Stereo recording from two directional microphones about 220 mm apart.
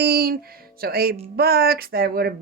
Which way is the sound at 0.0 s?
45° right (ahead or behind).